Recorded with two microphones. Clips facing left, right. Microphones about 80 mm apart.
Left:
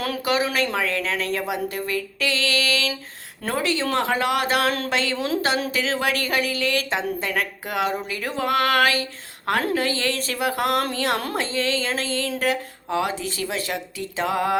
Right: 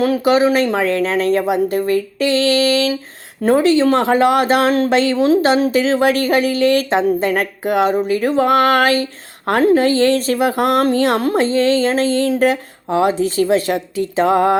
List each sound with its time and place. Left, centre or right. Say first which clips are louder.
0.0 s a woman's voice: right 10 dB; right